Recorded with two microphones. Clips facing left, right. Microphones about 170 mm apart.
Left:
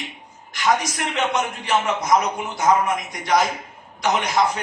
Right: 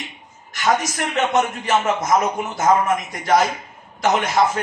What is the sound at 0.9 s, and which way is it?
A man's voice, 45° right (ahead or behind).